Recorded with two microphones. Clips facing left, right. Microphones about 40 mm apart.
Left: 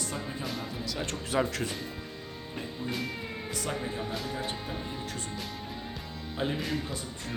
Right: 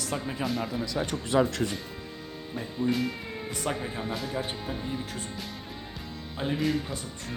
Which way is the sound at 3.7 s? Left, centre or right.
Right.